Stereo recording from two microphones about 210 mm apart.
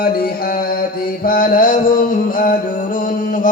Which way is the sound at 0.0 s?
45° left (ahead or behind).